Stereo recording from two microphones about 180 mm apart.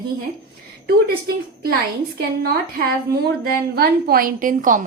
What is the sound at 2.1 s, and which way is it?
Speech, 60° right (ahead or behind).